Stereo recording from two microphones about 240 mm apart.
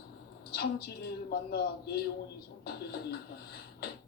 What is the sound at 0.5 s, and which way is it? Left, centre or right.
A man's voice, left.